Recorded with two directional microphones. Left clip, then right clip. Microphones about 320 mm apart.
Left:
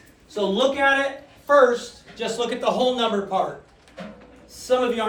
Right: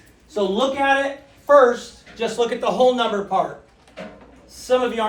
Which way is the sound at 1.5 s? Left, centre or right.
Right.